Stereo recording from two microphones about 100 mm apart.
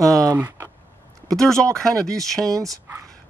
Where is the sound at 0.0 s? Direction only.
35° right (ahead or behind).